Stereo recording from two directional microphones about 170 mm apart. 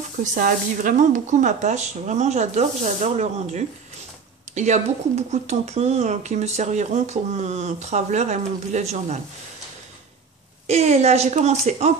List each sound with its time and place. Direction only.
0.2 s speech: 50° right (ahead or behind)
10.7 s speech: 40° right (ahead or behind)